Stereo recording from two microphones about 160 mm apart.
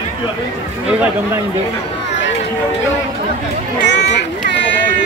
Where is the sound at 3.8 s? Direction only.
90° left.